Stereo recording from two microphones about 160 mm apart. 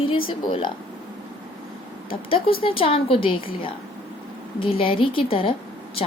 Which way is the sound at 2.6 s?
35° left (ahead or behind).